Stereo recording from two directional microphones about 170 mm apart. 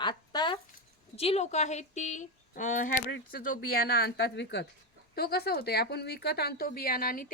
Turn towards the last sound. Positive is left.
turn(degrees=60)  # may be behind; listen again after turning